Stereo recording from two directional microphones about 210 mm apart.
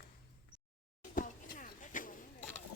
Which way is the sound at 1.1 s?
40° left (ahead or behind).